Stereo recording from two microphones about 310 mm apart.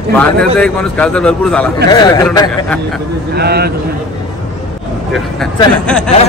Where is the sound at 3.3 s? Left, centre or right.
Right.